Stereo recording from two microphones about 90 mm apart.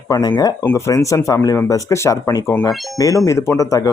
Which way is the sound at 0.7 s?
40° left (ahead or behind).